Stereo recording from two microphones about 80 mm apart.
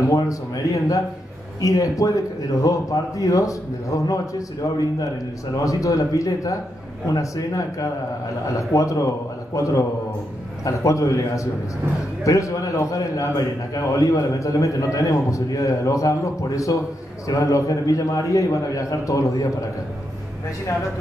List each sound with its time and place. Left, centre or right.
0.1 s a man's voice: left